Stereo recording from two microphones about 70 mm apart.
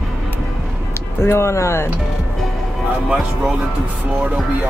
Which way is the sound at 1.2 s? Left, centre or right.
Left.